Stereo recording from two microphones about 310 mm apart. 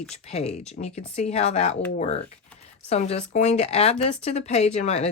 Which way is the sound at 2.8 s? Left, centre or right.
Centre.